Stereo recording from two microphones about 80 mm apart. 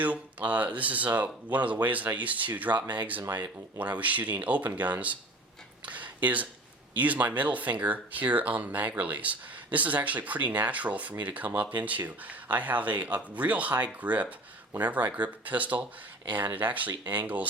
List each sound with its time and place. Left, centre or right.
0.0 s speech: centre
5.8 s a sound: centre
6.9 s speech: right